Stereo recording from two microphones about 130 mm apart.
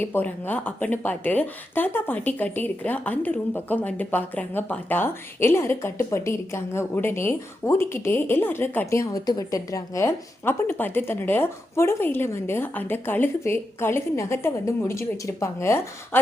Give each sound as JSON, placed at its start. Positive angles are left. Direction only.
{"t": 0.0, "sound": "speech", "side_deg": 15}